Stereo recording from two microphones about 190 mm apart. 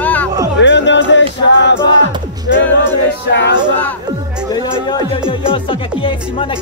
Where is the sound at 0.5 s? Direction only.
70° left (ahead or behind).